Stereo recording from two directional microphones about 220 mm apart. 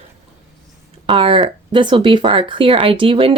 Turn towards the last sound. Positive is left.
turn(degrees=-25)  # may be behind; listen again after turning